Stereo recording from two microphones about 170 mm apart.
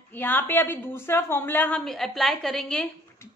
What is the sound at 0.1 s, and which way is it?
A woman's voice, 10° left (ahead or behind).